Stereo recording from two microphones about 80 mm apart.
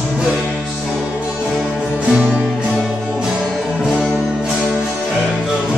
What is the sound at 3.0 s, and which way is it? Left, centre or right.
Music, centre.